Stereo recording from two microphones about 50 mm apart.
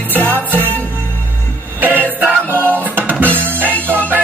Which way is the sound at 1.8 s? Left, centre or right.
Right.